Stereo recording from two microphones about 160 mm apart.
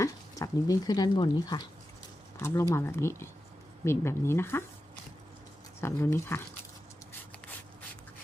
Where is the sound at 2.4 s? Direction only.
15° left (ahead or behind).